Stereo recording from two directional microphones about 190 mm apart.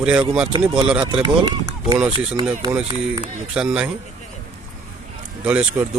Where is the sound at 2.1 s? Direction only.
30° right (ahead or behind).